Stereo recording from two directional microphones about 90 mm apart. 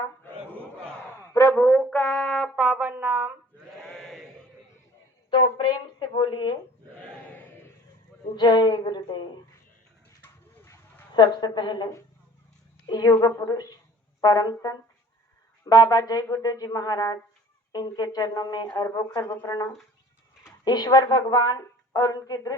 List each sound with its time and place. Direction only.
1.3 s a sound: 35° left (ahead or behind)
1.5 s brass instrument: 20° left (ahead or behind)
1.8 s brass instrument: 5° left (ahead or behind); by 3.3 s 20° right (ahead or behind)
3.8 s sheep: 5° left (ahead or behind)
5.3 s speech: 70° left (ahead or behind)
8.4 s a woman's voice: 50° left (ahead or behind)
10.2 s bird: 25° left (ahead or behind)
11.1 s a woman's voice: 55° left (ahead or behind)
12.9 s a woman's voice: 45° left (ahead or behind)
19.2 s speech: 20° left (ahead or behind)
19.5 s speech: 35° left (ahead or behind)
20.7 s a woman's voice: 50° left (ahead or behind)